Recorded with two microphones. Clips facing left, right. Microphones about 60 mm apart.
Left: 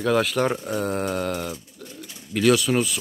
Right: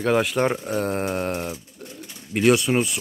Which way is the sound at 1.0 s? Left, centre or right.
Right.